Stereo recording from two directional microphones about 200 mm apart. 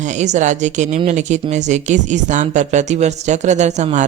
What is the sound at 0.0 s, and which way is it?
Speech, 35° right (ahead or behind).